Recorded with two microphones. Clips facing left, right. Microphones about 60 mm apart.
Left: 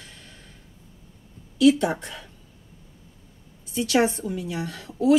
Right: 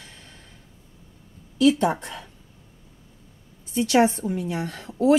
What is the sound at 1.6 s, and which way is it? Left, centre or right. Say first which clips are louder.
Speech: left 1 dB; right.